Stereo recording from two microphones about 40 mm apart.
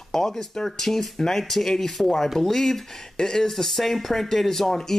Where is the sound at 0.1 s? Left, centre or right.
Centre.